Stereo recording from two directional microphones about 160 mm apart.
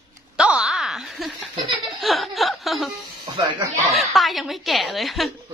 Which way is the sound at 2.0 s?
Centre (ahead or behind).